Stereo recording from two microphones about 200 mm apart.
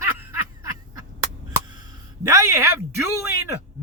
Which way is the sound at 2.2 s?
15° right (ahead or behind).